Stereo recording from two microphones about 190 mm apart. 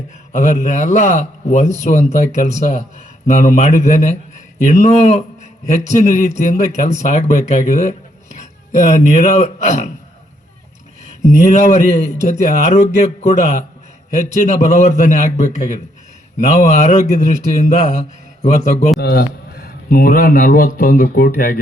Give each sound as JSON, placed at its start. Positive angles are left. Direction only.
{"t": 0.3, "sound": "a man's voice", "side_deg": 40}
{"t": 11.2, "sound": "a man's voice", "side_deg": 40}
{"t": 12.1, "sound": "speech", "side_deg": -45}
{"t": 12.4, "sound": "a man's voice", "side_deg": 40}
{"t": 18.9, "sound": "a man's voice", "side_deg": 55}